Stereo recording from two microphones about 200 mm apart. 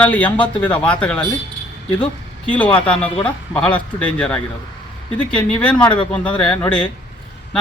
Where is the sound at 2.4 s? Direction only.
5° left (ahead or behind).